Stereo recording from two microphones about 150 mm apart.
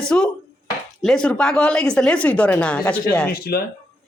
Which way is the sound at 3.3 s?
90° left.